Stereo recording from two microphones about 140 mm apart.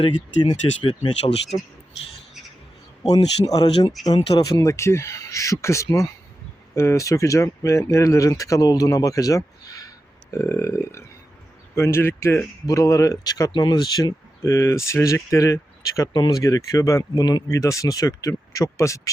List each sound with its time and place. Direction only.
0.0 s speech: 35° left (ahead or behind)
3.4 s speech: 25° left (ahead or behind)